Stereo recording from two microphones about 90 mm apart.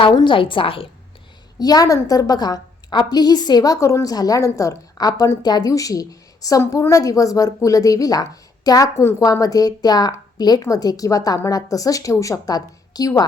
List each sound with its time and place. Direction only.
0.1 s a woman's voice: 50° left (ahead or behind)
0.3 s a woman's voice: 70° left (ahead or behind)
1.5 s a woman's voice: 45° left (ahead or behind)